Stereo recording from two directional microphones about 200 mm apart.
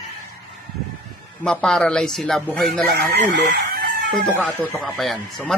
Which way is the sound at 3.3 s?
60° right (ahead or behind).